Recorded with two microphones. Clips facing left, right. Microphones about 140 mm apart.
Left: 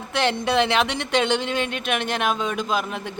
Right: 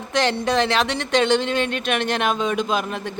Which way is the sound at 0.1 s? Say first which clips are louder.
Right 1 dB; 10° left (ahead or behind).